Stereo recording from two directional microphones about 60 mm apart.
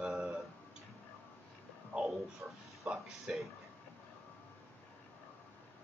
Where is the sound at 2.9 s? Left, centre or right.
Centre.